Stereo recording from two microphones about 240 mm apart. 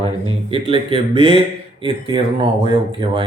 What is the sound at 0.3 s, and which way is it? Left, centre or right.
Speech, right.